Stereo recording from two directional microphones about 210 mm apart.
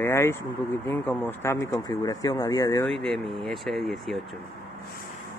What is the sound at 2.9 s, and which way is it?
Speech, centre (ahead or behind).